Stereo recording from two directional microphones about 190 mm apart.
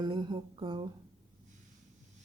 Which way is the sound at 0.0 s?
25° right (ahead or behind).